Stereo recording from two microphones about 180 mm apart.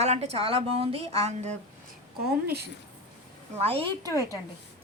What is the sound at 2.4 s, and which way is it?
Speech, 60° right (ahead or behind).